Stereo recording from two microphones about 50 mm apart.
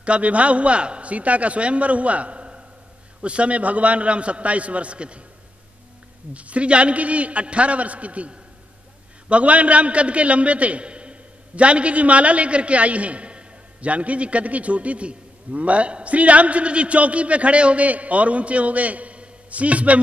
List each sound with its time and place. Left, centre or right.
0.0 s a man's voice: right
6.3 s a man's voice: right